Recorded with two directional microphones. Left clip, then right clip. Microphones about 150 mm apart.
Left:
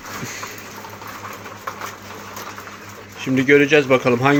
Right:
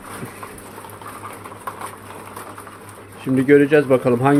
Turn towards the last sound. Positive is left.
turn(degrees=-25)  # may be behind; listen again after turning